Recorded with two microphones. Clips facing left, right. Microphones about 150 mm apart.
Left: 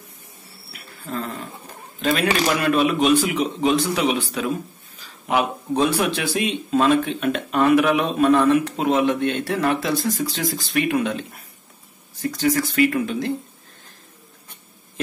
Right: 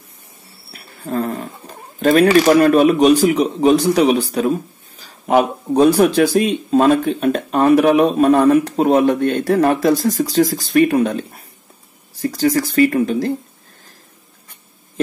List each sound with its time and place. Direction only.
0.7 s dog: 40° right (ahead or behind)
2.0 s speech: 45° right (ahead or behind)